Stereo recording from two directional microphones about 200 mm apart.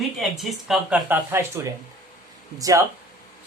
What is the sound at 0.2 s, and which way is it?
Speech, centre (ahead or behind).